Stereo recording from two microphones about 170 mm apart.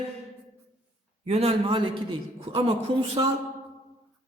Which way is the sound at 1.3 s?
35° right (ahead or behind).